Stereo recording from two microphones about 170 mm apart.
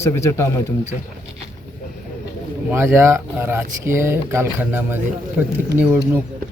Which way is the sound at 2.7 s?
15° right (ahead or behind).